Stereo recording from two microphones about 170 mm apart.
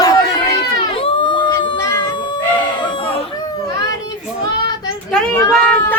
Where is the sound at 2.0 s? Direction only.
30° left (ahead or behind).